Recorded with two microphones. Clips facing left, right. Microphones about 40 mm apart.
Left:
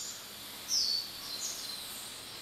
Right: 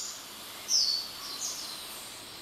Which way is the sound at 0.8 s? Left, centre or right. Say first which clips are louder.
Right 2 dB; right.